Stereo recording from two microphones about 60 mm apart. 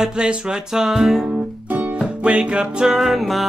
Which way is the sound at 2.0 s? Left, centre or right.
Centre.